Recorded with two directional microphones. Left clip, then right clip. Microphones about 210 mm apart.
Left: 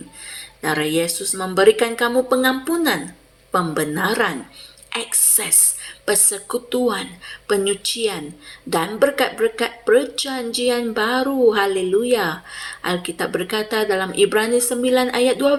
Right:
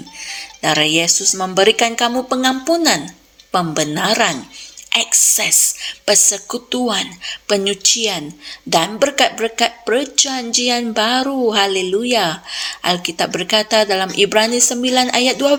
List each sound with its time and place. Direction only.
0.6 s a woman's voice: 40° right (ahead or behind)